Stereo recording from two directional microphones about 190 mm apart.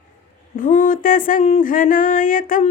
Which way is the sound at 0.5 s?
45° left (ahead or behind).